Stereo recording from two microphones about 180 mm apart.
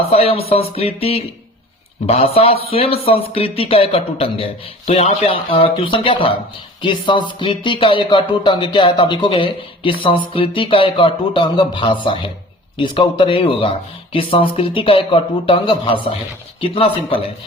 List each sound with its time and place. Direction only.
0.0 s speech: 35° left (ahead or behind)